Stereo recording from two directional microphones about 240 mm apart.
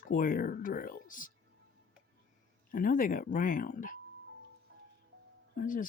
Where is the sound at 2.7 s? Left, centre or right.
Left.